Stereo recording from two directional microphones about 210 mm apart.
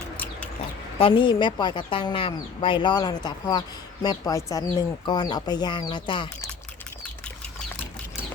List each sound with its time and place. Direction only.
0.9 s speech: 25° left (ahead or behind)